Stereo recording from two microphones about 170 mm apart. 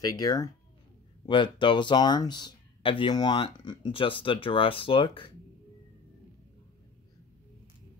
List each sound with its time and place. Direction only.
0.0 s speech: 25° left (ahead or behind)